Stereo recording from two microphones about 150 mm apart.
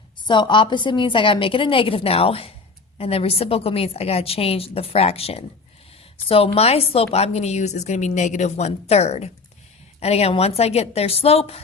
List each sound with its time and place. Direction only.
0.3 s a woman's voice: 30° left (ahead or behind)